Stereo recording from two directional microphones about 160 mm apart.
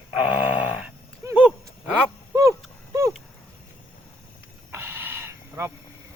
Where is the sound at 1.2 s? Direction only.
20° right (ahead or behind).